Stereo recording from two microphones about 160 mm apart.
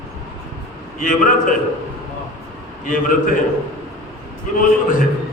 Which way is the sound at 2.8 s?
55° left (ahead or behind).